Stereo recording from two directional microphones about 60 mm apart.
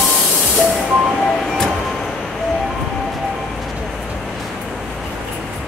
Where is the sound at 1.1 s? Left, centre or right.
Centre.